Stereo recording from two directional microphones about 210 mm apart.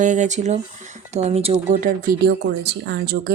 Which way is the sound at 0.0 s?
35° right (ahead or behind).